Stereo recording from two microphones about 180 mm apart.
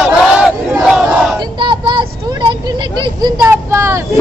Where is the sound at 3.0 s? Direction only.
20° right (ahead or behind).